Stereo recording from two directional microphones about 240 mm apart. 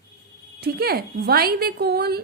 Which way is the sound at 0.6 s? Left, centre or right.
Right.